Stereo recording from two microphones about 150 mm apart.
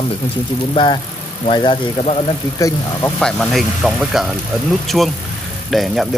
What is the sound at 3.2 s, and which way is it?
Speech, centre (ahead or behind).